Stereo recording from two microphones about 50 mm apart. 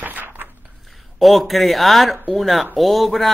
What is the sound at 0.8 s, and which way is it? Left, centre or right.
Speech, centre.